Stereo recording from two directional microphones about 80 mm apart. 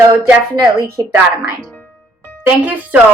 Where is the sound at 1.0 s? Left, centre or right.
Right.